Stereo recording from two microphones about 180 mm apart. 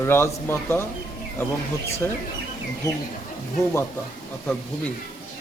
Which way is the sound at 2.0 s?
10° left (ahead or behind).